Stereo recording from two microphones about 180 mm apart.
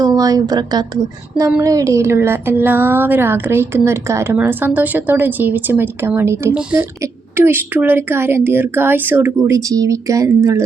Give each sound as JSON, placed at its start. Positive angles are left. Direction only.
{"t": 0.0, "sound": "a woman's voice", "side_deg": -20}